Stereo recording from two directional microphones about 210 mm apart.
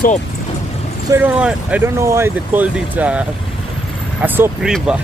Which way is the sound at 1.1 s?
5° right (ahead or behind).